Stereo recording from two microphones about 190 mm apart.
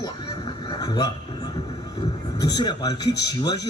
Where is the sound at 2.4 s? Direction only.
20° left (ahead or behind).